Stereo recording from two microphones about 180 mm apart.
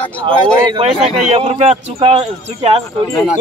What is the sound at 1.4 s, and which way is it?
Speech, 35° right (ahead or behind).